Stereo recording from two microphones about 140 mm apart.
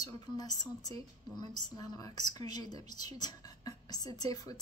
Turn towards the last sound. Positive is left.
turn(degrees=25)  # may be behind; listen again after turning